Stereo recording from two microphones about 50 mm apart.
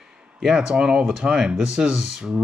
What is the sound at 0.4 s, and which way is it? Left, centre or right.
Speech, centre.